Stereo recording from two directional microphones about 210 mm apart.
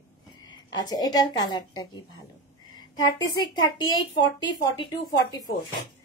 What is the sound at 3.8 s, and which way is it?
A woman's voice, 20° left (ahead or behind).